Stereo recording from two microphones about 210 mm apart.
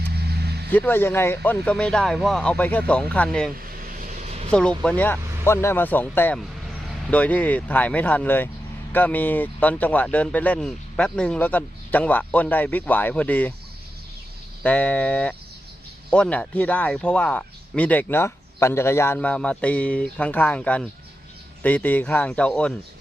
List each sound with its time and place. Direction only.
0.1 s vehicle: 50° right (ahead or behind)
0.7 s speech: 10° left (ahead or behind)
3.7 s vehicle: 40° right (ahead or behind)
4.8 s speech: 5° left (ahead or behind)
14.6 s speech: 5° left (ahead or behind)